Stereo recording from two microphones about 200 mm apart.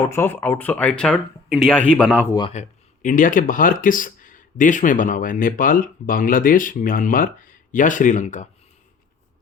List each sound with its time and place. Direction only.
0.0 s speech: 10° left (ahead or behind)
2.5 s speech: 35° left (ahead or behind)